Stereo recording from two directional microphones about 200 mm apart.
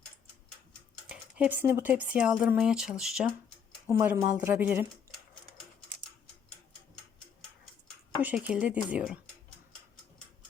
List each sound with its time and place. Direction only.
1.0 s speech: 5° right (ahead or behind)
3.8 s speech: 15° right (ahead or behind)
8.2 s speech: 5° right (ahead or behind)